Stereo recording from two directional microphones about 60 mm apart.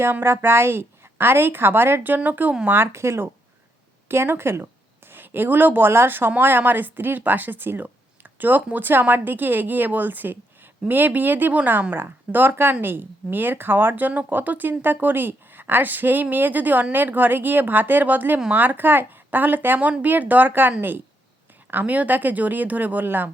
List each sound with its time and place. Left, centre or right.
0.0 s speech: right
2.6 s speech: right